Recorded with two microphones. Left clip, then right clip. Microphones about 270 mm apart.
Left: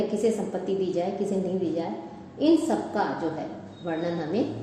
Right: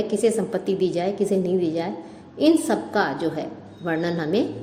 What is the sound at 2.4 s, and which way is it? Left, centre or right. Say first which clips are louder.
Speech: right 3 dB; right.